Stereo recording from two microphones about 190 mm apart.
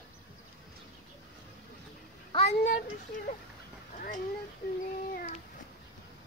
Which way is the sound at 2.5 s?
45° left (ahead or behind).